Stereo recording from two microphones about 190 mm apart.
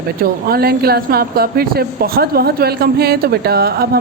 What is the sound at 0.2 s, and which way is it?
A woman's voice, 50° right (ahead or behind).